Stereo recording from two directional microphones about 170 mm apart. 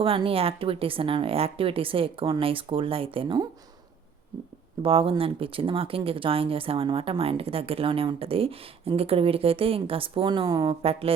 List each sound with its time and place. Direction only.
0.0 s speech: 30° right (ahead or behind)
4.8 s speech: 35° right (ahead or behind)